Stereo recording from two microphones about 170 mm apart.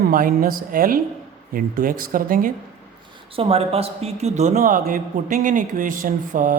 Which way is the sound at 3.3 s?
35° right (ahead or behind).